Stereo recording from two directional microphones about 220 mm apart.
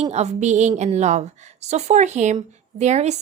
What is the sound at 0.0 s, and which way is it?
Speech, 30° right (ahead or behind).